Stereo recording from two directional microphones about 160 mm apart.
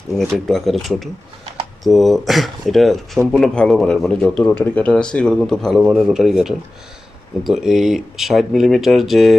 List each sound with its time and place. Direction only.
0.2 s a man's voice: centre (ahead or behind)